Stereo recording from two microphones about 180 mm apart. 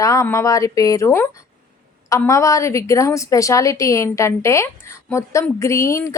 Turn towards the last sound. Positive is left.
turn(degrees=15)  # may be behind; listen again after turning